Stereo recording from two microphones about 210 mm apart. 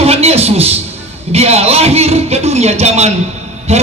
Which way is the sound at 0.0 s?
30° right (ahead or behind).